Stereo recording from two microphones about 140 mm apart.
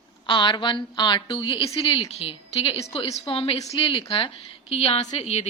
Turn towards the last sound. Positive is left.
turn(degrees=50)  # may be behind; listen again after turning